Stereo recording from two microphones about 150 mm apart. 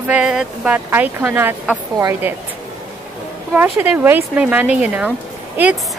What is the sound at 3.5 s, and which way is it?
Speech, 15° right (ahead or behind).